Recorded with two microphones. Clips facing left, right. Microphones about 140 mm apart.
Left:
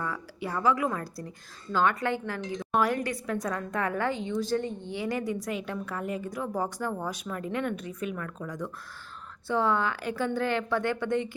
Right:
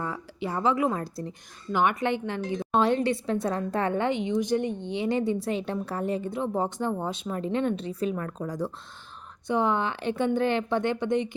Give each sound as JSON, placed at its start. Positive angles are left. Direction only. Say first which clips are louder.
{"t": 0.0, "sound": "a woman's voice", "louder": "right 2 dB", "side_deg": -25}
{"t": 9.5, "sound": "a woman's voice", "louder": "right 1 dB", "side_deg": -20}